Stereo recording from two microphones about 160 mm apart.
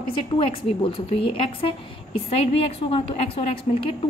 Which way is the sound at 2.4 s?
35° left (ahead or behind).